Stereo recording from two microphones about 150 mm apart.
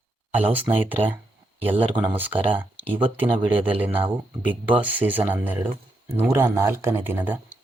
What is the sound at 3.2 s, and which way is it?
Speech, 35° right (ahead or behind).